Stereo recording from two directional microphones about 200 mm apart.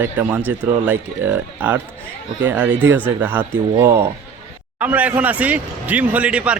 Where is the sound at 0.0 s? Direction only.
10° right (ahead or behind).